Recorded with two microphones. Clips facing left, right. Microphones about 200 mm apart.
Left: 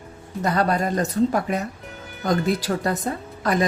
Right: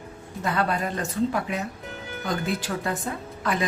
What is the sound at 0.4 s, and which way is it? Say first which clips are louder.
Speech: left 4 dB; 40° left (ahead or behind).